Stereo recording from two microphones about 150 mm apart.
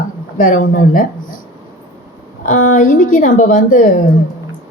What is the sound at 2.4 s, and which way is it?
Speech, 60° left (ahead or behind).